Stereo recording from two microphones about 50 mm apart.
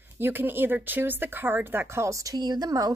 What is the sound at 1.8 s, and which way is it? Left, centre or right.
Speech, right.